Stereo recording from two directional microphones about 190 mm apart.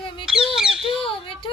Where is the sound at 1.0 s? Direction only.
30° left (ahead or behind).